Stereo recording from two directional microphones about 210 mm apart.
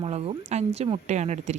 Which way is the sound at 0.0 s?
30° right (ahead or behind).